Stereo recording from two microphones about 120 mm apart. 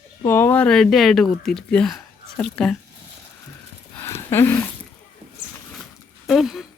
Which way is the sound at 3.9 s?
20° left (ahead or behind).